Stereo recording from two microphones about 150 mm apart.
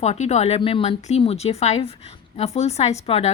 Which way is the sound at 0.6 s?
35° left (ahead or behind).